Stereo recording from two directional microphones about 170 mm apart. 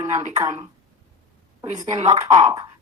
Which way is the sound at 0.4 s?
20° right (ahead or behind).